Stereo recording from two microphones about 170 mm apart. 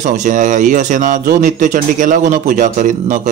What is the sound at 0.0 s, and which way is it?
Speech, 45° right (ahead or behind).